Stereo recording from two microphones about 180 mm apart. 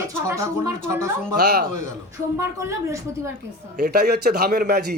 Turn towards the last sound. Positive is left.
turn(degrees=-60)  # may be behind; listen again after turning